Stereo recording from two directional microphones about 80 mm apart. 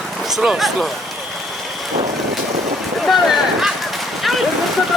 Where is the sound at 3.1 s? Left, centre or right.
Centre.